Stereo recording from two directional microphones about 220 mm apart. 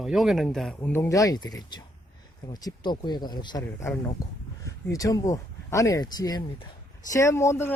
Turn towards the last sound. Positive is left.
turn(degrees=10)  # may be behind; listen again after turning